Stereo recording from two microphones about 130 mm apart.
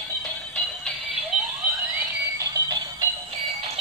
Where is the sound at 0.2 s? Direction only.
10° left (ahead or behind).